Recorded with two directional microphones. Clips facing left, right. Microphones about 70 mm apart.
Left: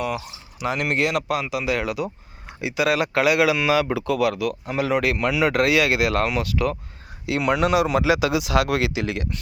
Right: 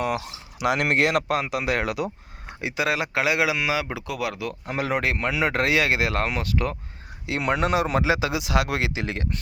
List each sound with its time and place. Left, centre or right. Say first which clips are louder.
0.0 s speech: right 1 dB; right
2.6 s speech: left 4 dB; right
4.7 s speech: left 2 dB; right